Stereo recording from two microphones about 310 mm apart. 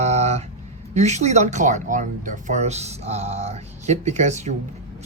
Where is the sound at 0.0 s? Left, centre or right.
Right.